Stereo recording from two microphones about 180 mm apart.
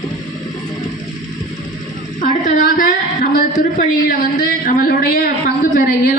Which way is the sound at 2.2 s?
50° left (ahead or behind).